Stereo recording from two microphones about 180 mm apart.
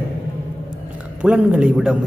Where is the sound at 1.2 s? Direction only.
5° right (ahead or behind).